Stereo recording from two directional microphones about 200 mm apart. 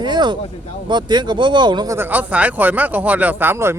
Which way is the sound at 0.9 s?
20° right (ahead or behind).